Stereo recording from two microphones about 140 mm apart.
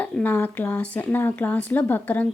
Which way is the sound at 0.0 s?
10° left (ahead or behind).